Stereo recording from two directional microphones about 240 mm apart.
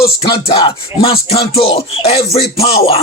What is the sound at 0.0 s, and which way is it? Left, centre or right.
Music, left.